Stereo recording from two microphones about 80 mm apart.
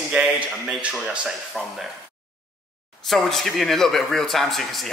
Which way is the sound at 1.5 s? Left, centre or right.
Centre.